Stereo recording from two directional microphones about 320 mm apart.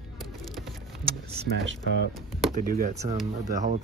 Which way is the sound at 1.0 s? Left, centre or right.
Right.